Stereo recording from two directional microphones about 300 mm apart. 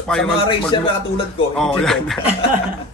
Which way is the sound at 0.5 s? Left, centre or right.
Centre.